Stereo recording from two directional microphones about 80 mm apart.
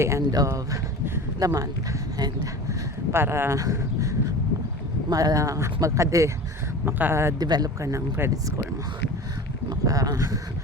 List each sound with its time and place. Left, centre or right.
0.0 s speech: right
2.1 s speech: right
3.1 s speech: right
6.8 s speech: right
7.3 s speech: right
7.8 s speech: right
9.6 s speech: right